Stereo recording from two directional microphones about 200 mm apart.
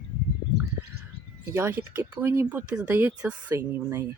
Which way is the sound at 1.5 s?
10° right (ahead or behind).